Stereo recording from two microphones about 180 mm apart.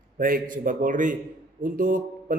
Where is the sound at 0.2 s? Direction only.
50° right (ahead or behind).